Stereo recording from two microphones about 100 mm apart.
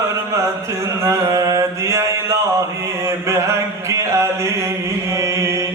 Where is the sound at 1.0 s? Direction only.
35° right (ahead or behind).